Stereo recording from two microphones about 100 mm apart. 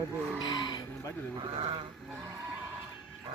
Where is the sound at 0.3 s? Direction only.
45° left (ahead or behind).